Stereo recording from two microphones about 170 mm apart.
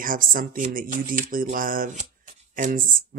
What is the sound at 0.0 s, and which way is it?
Speech, 55° right (ahead or behind).